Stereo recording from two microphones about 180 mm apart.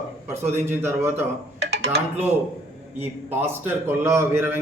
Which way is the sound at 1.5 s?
70° right (ahead or behind).